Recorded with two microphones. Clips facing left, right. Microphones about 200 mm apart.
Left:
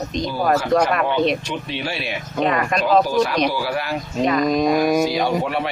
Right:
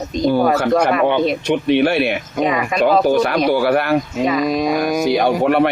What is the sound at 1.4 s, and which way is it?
Speech, 60° right (ahead or behind).